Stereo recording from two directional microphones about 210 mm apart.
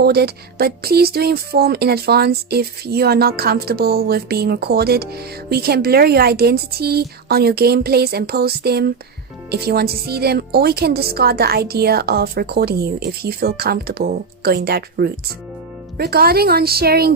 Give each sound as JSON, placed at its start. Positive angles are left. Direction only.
{"t": 0.0, "sound": "speech", "side_deg": -50}